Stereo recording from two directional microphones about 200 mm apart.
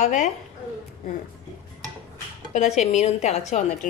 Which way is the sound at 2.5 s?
35° left (ahead or behind).